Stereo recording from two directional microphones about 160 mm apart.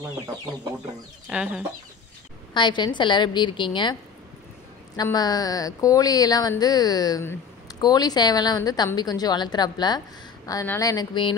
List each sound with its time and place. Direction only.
1.3 s chicken: 5° right (ahead or behind)
2.5 s a woman's voice: 30° left (ahead or behind)
4.9 s a woman's voice: 25° left (ahead or behind)